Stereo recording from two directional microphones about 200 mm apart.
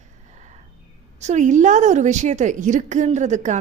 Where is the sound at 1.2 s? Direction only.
35° right (ahead or behind).